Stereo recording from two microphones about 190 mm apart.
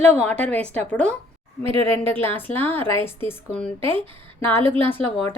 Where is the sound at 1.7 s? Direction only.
30° right (ahead or behind).